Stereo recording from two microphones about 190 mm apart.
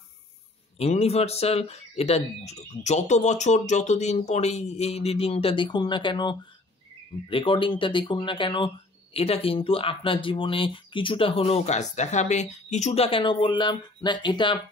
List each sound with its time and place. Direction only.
0.7 s speech: 35° left (ahead or behind)